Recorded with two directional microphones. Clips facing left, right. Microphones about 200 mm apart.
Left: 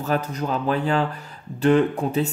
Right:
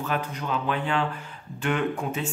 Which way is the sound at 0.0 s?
40° left (ahead or behind).